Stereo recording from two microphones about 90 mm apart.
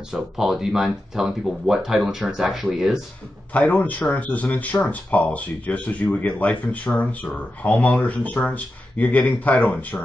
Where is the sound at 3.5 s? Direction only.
15° left (ahead or behind).